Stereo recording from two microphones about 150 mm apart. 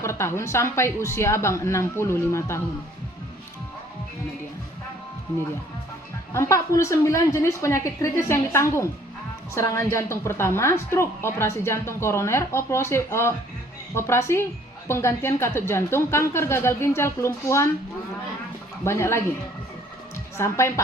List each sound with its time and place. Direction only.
0.0 s a woman's voice: 15° left (ahead or behind)
6.3 s a woman's voice: 20° left (ahead or behind)
18.9 s a woman's voice: 15° left (ahead or behind)
20.3 s a woman's voice: 20° left (ahead or behind)